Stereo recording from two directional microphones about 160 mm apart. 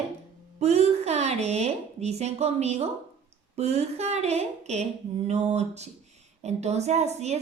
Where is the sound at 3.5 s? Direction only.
40° right (ahead or behind).